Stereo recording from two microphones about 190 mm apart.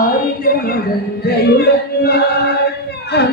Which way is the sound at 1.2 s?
55° left (ahead or behind).